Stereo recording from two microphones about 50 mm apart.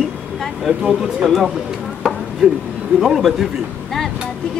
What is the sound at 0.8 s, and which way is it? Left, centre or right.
Speech, centre.